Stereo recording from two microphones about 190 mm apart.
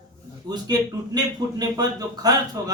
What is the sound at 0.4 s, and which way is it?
A man's voice, 20° right (ahead or behind).